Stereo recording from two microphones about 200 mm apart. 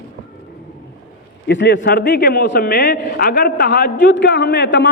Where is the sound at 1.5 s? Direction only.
60° left (ahead or behind).